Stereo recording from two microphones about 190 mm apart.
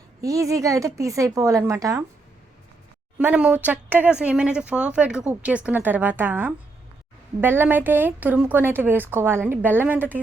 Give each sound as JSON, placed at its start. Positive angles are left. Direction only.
{"t": 0.2, "sound": "speech", "side_deg": -15}
{"t": 3.2, "sound": "speech", "side_deg": -5}